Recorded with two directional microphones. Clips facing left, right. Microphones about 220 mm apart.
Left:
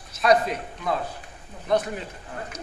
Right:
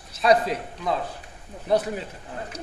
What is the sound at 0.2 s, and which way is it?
Speech, 30° right (ahead or behind).